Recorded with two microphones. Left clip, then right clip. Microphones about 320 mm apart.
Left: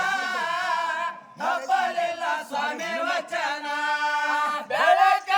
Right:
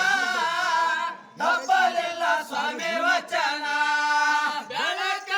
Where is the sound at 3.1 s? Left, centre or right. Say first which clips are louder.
Right 5 dB; centre.